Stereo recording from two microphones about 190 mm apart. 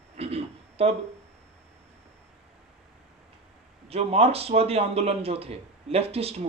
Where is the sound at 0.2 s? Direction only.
30° right (ahead or behind).